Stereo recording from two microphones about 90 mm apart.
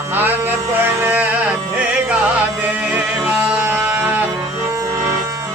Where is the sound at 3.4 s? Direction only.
20° right (ahead or behind).